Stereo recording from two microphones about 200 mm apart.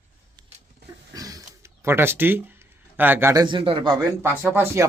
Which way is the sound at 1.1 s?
15° right (ahead or behind).